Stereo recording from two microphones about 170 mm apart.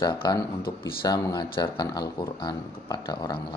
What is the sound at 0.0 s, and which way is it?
Speech, 25° left (ahead or behind).